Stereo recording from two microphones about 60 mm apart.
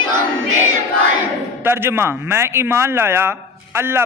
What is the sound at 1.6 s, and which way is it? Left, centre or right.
A man's voice, right.